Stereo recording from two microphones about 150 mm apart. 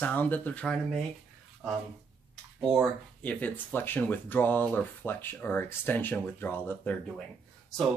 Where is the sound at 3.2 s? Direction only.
10° left (ahead or behind).